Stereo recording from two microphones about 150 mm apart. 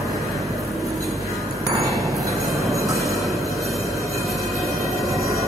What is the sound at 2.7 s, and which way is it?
Train, 20° right (ahead or behind).